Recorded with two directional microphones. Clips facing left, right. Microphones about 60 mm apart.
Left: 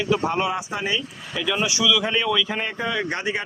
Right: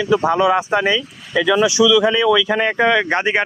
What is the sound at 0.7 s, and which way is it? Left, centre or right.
Speech, right.